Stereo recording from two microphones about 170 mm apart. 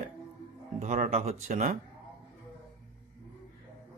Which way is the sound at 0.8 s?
40° right (ahead or behind).